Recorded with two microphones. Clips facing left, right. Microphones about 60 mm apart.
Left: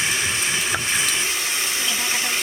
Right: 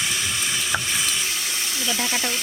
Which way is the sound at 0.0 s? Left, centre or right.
Left.